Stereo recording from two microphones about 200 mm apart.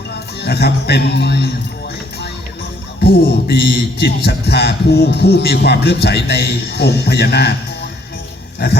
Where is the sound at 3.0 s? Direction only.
55° left (ahead or behind).